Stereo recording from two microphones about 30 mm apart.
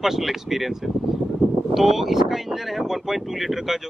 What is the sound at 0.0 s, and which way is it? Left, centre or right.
Speech, centre.